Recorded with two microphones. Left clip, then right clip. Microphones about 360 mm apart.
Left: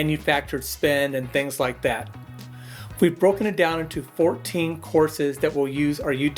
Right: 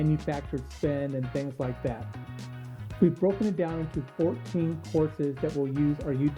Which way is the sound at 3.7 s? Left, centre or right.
Centre.